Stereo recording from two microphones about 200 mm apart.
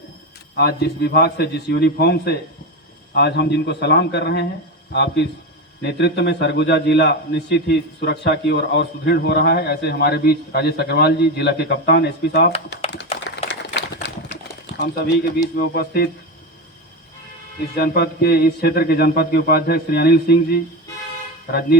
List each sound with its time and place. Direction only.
0.5 s a man's voice: 55° left (ahead or behind)
13.3 s a sound: 60° left (ahead or behind)
15.5 s speech: 55° left (ahead or behind)
17.7 s speech: 55° left (ahead or behind)